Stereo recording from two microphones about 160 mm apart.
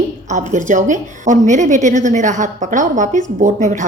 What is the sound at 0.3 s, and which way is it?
A woman's voice, 50° right (ahead or behind).